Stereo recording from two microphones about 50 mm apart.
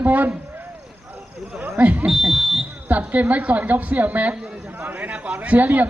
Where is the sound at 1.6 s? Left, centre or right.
Right.